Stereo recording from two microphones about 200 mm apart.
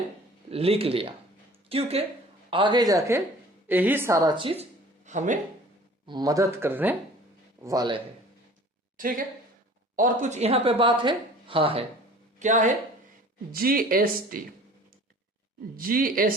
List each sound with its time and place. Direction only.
0.5 s a woman's voice: 30° right (ahead or behind)
5.0 s speech: 35° right (ahead or behind)
6.1 s a woman's voice: 20° right (ahead or behind)
9.0 s a woman's voice: 45° right (ahead or behind); by 11.9 s 25° right (ahead or behind)
12.4 s speech: 40° right (ahead or behind)
15.7 s speech: 45° right (ahead or behind)